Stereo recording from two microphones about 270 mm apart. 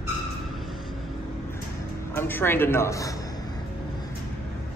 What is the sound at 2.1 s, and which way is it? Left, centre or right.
A man's voice, centre.